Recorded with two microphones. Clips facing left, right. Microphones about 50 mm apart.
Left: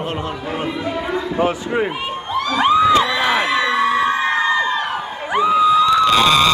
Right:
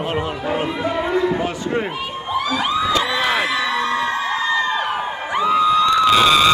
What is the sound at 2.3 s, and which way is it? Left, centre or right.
Crowd, centre.